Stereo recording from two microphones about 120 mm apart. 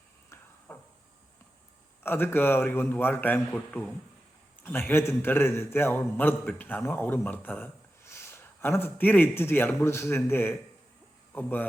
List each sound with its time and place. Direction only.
0.7 s cupboard open or close: 10° left (ahead or behind)
2.0 s a man's voice: 20° left (ahead or behind)